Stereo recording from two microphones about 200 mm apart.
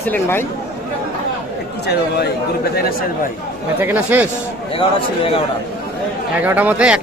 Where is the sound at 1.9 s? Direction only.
55° left (ahead or behind).